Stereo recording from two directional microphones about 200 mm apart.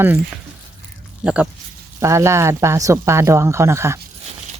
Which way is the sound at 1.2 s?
5° right (ahead or behind).